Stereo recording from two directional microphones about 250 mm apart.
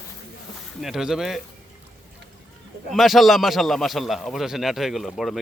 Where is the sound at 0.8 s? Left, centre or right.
Centre.